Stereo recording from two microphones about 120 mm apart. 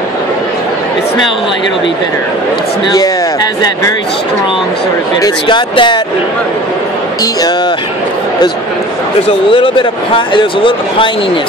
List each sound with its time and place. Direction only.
5.2 s speech: 40° left (ahead or behind)
9.5 s speech: 45° left (ahead or behind)